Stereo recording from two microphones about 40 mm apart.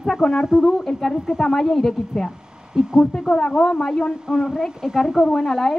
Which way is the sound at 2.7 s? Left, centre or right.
Centre.